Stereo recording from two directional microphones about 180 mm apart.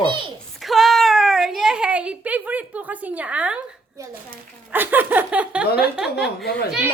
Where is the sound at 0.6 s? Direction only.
Centre (ahead or behind).